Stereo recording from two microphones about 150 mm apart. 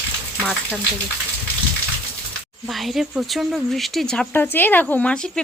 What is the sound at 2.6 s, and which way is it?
A woman's voice, centre (ahead or behind).